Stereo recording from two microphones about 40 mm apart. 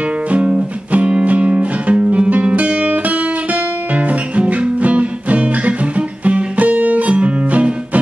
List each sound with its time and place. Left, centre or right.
0.3 s music: right